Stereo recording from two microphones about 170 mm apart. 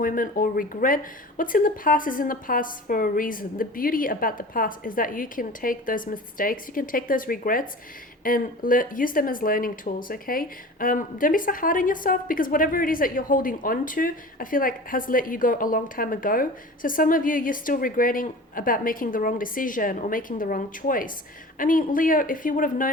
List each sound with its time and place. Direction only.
0.0 s speech: 55° left (ahead or behind)